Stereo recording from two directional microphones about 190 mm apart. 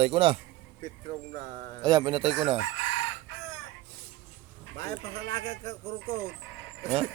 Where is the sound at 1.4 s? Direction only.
45° right (ahead or behind).